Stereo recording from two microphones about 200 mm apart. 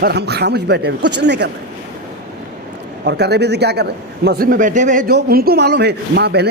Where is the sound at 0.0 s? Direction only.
55° right (ahead or behind).